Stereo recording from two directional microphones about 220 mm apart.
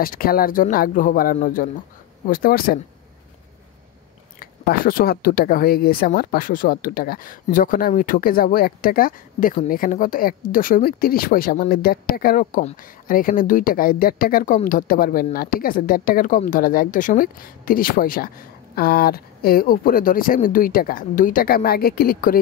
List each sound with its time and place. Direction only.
0.0 s speech: 40° left (ahead or behind)
4.4 s speech: 40° left (ahead or behind)